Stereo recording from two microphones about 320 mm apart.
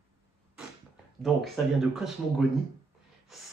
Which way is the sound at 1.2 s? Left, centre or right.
Centre.